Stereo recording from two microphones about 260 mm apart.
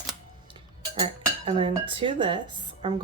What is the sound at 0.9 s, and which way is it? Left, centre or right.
A woman's voice, centre.